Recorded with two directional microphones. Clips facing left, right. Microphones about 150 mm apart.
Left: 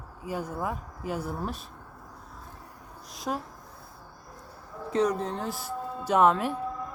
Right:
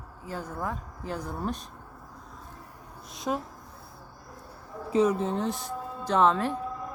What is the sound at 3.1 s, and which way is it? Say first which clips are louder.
Speech: right 2 dB; centre (ahead or behind).